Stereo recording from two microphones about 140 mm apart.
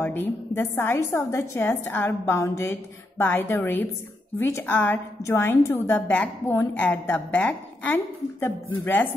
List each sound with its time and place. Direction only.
0.0 s a woman's voice: 15° left (ahead or behind)